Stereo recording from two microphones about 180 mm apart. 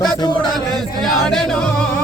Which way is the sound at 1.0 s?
Centre (ahead or behind).